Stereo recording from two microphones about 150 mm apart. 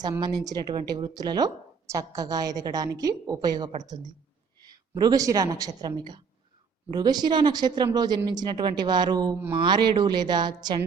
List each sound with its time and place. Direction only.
0.2 s a woman's voice: 25° right (ahead or behind)